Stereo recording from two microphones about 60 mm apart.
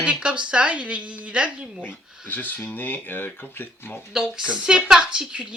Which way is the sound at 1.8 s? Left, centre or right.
Left.